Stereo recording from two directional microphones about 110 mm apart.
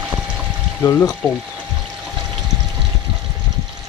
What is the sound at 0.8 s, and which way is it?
Speech, 25° left (ahead or behind).